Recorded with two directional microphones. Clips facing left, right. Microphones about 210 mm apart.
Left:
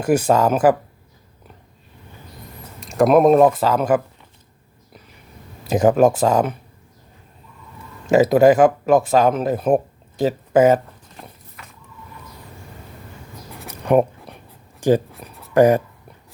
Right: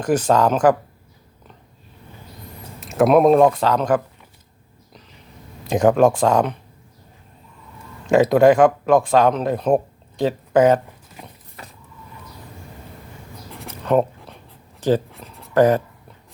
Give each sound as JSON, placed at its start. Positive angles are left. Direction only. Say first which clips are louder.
{"t": 0.0, "sound": "speech", "louder": "left 1 dB", "side_deg": 10}
{"t": 2.8, "sound": "speech", "louder": "even", "side_deg": 0}
{"t": 4.9, "sound": "a sound", "louder": "left 1 dB", "side_deg": 10}
{"t": 5.6, "sound": "speech", "louder": "even", "side_deg": 5}
{"t": 8.1, "sound": "speech", "louder": "left 1 dB", "side_deg": 5}
{"t": 13.6, "sound": "a sound", "louder": "left 2 dB", "side_deg": 10}
{"t": 14.8, "sound": "speech", "louder": "left 2 dB", "side_deg": 10}